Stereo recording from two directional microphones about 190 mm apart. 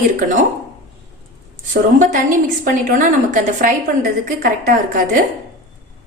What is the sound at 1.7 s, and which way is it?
A woman's voice, 45° right (ahead or behind).